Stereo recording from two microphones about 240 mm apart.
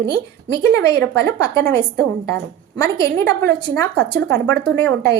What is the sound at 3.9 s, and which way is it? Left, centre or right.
A woman's voice, right.